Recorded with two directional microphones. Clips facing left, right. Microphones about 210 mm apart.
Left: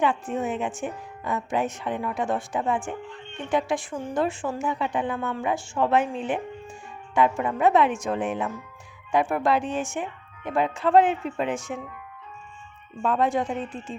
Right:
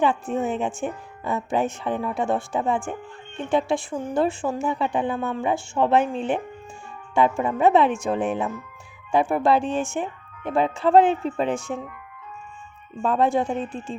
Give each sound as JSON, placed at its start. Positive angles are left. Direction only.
{"t": 0.0, "sound": "a woman's voice", "side_deg": -30}
{"t": 13.0, "sound": "a woman's voice", "side_deg": -30}